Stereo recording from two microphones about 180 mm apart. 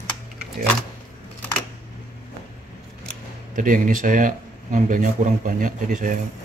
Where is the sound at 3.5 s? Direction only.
45° right (ahead or behind).